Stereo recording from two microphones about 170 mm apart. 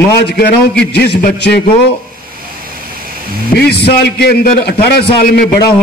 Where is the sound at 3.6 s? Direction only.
75° left (ahead or behind).